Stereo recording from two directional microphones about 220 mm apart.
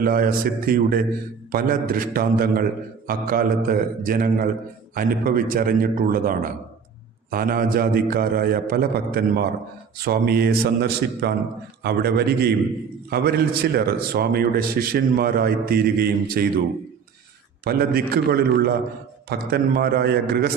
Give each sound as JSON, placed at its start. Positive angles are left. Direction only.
{"t": 0.0, "sound": "a man's voice", "side_deg": -40}
{"t": 17.6, "sound": "a man's voice", "side_deg": -45}